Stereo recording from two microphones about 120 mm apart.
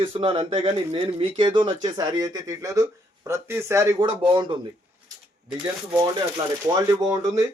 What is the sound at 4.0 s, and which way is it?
Speech, 45° right (ahead or behind).